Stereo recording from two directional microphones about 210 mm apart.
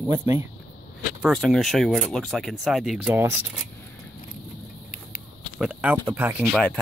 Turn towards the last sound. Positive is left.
turn(degrees=-5)  # may be behind; listen again after turning